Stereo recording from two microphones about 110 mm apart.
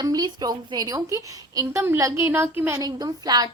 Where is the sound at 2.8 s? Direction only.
35° right (ahead or behind).